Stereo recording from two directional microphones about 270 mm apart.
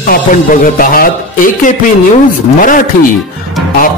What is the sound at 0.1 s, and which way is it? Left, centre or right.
Speech, left.